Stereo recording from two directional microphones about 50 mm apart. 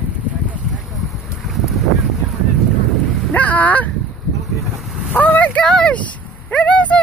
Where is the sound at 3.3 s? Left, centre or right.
Left.